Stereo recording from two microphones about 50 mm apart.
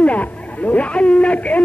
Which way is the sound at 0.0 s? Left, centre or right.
Left.